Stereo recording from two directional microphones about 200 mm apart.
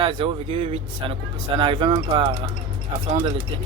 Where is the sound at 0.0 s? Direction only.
25° right (ahead or behind).